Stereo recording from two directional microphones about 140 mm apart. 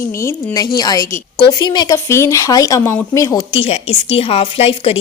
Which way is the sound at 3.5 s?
45° left (ahead or behind).